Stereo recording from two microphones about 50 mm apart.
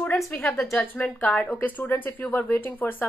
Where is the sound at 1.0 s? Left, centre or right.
Left.